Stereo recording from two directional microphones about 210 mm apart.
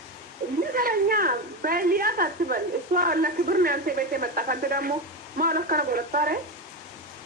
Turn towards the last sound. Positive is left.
turn(degrees=-45)  # may be behind; listen again after turning